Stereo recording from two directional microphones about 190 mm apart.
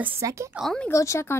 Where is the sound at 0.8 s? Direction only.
15° left (ahead or behind).